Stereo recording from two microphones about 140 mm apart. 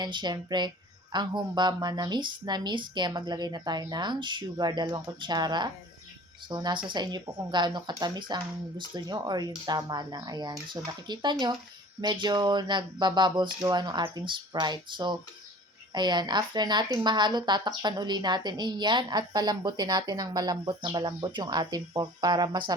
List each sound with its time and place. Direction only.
0.0 s speech: 30° right (ahead or behind)